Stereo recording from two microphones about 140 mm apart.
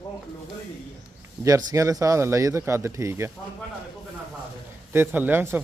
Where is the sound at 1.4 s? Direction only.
25° right (ahead or behind).